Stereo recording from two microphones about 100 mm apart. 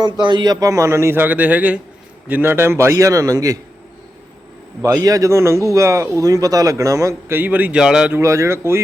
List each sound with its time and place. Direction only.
0.0 s a man's voice: 50° right (ahead or behind); by 3.6 s 35° right (ahead or behind)
4.8 s a man's voice: 35° right (ahead or behind); by 7.8 s 15° right (ahead or behind)
7.8 s speech: 5° right (ahead or behind)
8.2 s a man's voice: 30° right (ahead or behind)